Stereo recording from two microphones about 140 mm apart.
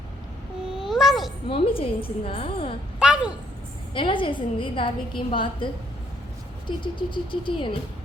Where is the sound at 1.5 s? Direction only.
40° left (ahead or behind).